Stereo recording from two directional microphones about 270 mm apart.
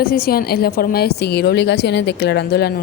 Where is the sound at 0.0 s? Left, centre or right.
Left.